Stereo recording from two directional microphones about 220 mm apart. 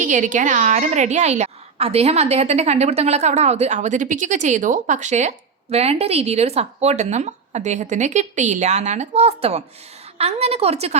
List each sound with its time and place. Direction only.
0.0 s a woman's voice: 35° right (ahead or behind)